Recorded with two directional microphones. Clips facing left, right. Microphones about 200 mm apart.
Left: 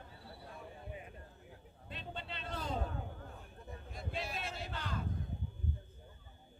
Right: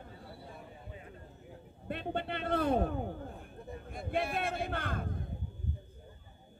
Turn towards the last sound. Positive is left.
turn(degrees=-55)  # may be behind; listen again after turning